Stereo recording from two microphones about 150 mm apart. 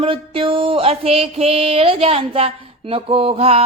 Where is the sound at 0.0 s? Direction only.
35° right (ahead or behind).